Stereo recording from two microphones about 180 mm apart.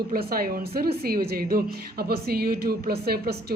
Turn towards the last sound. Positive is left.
turn(degrees=-60)  # may be behind; listen again after turning